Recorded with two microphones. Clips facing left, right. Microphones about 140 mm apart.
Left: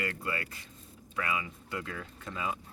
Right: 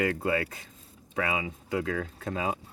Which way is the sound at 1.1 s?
90° right.